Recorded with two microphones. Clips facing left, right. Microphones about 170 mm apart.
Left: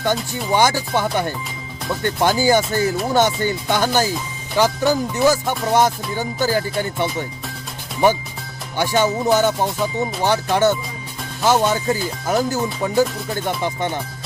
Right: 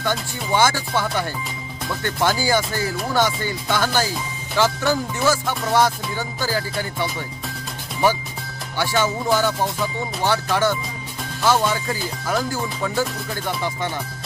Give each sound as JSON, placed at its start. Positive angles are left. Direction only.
{"t": 0.5, "sound": "music", "side_deg": 15}
{"t": 8.8, "sound": "music", "side_deg": 20}